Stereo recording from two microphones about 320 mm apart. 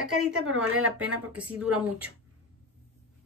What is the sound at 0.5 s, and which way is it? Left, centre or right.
Speech, right.